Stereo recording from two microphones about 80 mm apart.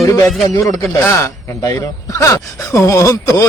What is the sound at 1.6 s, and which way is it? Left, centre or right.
Speech, left.